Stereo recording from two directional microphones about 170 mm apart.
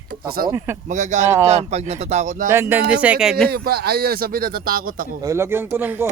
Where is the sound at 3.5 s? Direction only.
65° right (ahead or behind).